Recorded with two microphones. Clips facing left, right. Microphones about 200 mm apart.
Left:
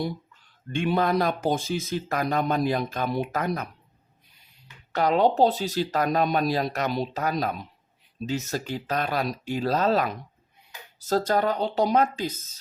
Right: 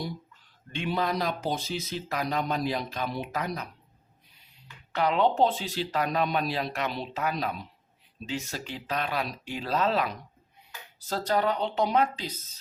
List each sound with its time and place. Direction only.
0.7 s speech: 50° left (ahead or behind)
4.9 s speech: 40° left (ahead or behind)